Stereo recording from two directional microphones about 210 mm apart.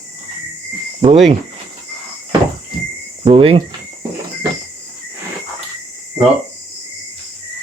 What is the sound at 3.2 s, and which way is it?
Speech, 25° right (ahead or behind).